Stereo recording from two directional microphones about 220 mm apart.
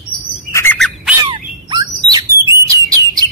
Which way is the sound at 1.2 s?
20° right (ahead or behind).